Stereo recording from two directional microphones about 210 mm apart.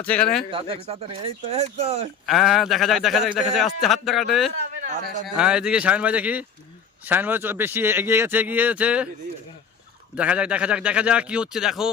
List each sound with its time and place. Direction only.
0.0 s speech: 5° left (ahead or behind)
0.5 s speech: 25° right (ahead or behind)
2.2 s a man's voice: centre (ahead or behind)
10.2 s speech: 5° right (ahead or behind)